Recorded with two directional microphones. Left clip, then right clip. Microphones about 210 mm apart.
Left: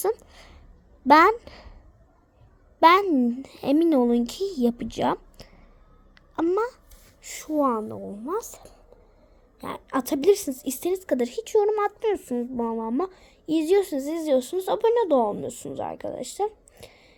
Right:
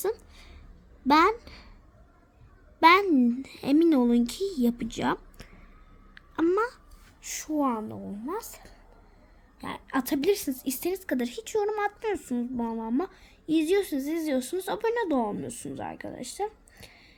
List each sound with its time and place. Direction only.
0.0 s a sound: 20° left (ahead or behind)
1.0 s a child's voice: 20° left (ahead or behind)
2.8 s a woman's voice: 10° left (ahead or behind)